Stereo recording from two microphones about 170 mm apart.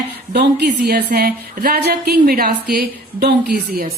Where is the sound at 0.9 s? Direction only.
65° right (ahead or behind).